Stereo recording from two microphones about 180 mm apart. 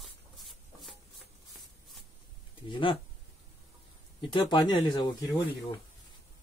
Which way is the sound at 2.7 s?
25° left (ahead or behind).